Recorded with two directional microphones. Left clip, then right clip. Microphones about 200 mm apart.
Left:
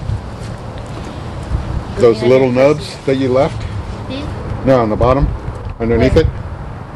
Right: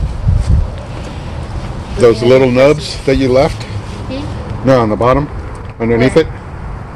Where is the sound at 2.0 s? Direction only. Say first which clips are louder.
Right 2 dB; 35° right (ahead or behind).